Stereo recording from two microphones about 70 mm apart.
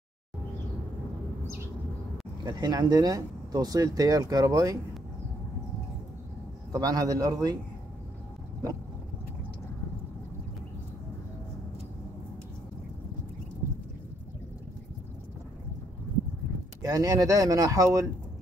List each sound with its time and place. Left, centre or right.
2.4 s speech: right
6.7 s speech: right
16.8 s speech: right